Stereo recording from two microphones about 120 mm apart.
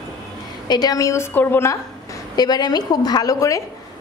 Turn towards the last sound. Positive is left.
turn(degrees=25)  # may be behind; listen again after turning